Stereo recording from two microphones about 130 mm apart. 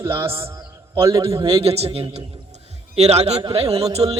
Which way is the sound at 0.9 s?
20° right (ahead or behind).